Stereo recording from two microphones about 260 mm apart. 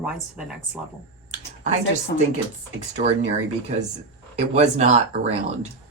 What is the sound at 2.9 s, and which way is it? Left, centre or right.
Speech, right.